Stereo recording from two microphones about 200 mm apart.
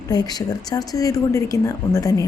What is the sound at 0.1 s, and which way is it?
A woman's voice, 20° left (ahead or behind).